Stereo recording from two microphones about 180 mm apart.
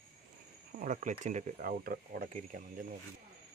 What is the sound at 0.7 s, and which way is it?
Speech, 45° right (ahead or behind).